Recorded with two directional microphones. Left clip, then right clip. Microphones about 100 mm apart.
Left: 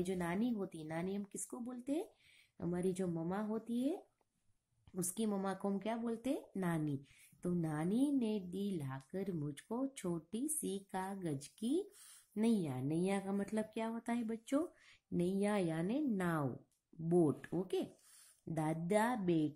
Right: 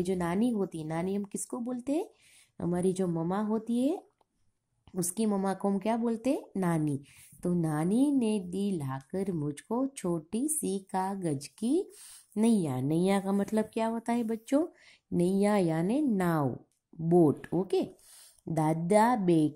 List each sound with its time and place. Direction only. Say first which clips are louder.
0.0 s speech: right 9 dB; 35° right (ahead or behind)